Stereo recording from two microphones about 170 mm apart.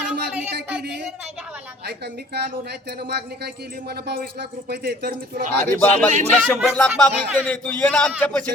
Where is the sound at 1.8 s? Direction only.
75° right (ahead or behind).